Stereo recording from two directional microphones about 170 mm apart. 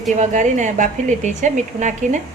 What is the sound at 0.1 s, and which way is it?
A woman's voice, 45° right (ahead or behind).